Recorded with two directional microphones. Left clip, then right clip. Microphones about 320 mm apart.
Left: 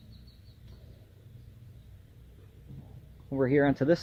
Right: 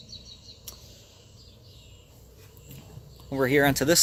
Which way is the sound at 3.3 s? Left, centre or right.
Centre.